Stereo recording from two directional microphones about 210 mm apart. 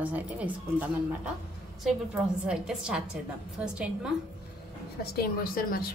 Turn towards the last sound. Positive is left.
turn(degrees=45)  # may be behind; listen again after turning